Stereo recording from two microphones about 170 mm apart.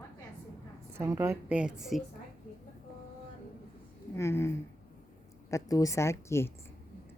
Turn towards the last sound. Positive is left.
turn(degrees=15)  # may be behind; listen again after turning